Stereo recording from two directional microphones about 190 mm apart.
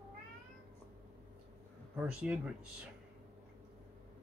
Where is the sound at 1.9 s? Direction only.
5° right (ahead or behind).